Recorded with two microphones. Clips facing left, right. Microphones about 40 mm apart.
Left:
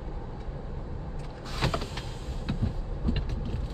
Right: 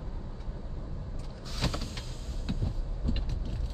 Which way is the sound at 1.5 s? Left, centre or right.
Left.